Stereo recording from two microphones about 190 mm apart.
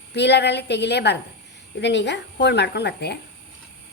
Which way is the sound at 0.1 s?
60° left (ahead or behind).